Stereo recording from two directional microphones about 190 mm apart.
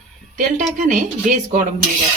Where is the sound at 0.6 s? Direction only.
40° right (ahead or behind).